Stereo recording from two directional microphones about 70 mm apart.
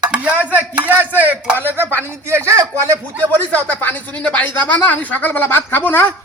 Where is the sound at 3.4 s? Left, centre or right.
Left.